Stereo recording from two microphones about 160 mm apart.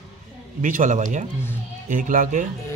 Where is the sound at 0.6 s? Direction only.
55° right (ahead or behind).